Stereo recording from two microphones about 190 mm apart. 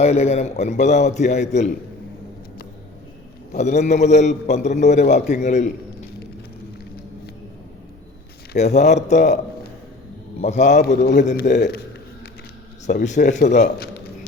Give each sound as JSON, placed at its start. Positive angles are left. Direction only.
{"t": 0.0, "sound": "a man's voice", "side_deg": 35}
{"t": 3.5, "sound": "a man's voice", "side_deg": 40}
{"t": 8.5, "sound": "a man's voice", "side_deg": 35}
{"t": 10.4, "sound": "a man's voice", "side_deg": 35}
{"t": 10.8, "sound": "a man's voice", "side_deg": 60}
{"t": 12.9, "sound": "a man's voice", "side_deg": 40}